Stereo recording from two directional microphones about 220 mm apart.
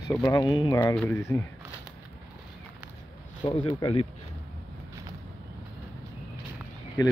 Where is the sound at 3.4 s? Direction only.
25° left (ahead or behind).